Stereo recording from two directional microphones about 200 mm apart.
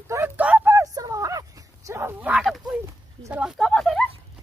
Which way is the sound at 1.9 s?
15° right (ahead or behind).